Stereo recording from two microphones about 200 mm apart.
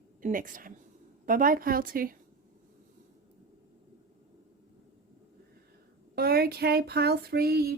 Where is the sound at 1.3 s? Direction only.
45° right (ahead or behind).